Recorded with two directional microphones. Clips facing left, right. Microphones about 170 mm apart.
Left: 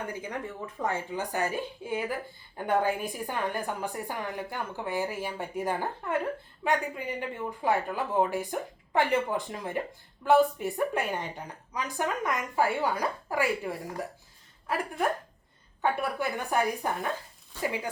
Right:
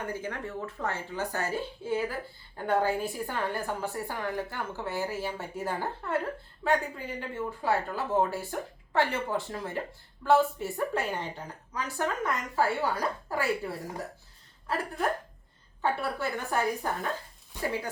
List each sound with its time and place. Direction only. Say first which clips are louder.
0.1 s a woman's voice: right 1 dB; 15° left (ahead or behind)
15.8 s a woman's voice: left 1 dB; 15° left (ahead or behind)
17.5 s speech: left 1 dB; 15° right (ahead or behind)